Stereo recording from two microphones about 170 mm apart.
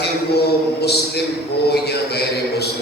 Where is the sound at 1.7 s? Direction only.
70° left (ahead or behind).